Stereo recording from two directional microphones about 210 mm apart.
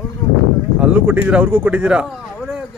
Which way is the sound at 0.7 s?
5° right (ahead or behind).